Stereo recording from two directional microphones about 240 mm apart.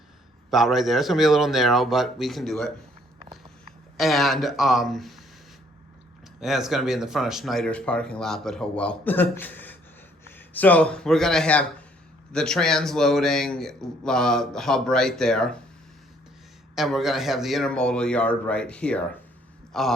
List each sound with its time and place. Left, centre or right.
0.5 s speech: centre
3.9 s speech: centre
6.4 s speech: centre
16.7 s speech: centre